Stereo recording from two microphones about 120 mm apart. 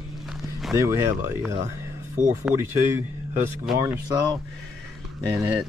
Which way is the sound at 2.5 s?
5° right (ahead or behind).